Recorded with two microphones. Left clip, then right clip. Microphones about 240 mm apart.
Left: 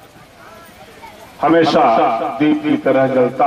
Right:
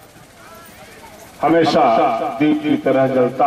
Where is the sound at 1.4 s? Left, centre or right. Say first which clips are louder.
Left 2 dB; centre.